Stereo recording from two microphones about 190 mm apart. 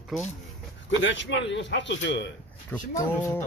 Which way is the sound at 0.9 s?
75° left (ahead or behind).